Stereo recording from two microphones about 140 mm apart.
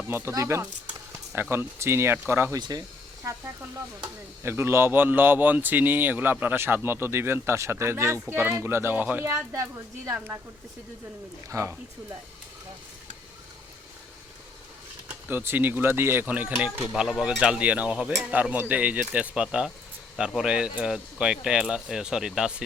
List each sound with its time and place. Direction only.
0.1 s speech: 15° right (ahead or behind)
2.6 s speech: 30° right (ahead or behind)
4.4 s speech: 15° right (ahead or behind)
11.4 s speech: 20° right (ahead or behind)
15.0 s speech: 15° right (ahead or behind)